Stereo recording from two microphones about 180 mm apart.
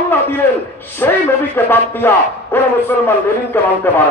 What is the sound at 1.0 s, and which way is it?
A man's voice, 10° left (ahead or behind).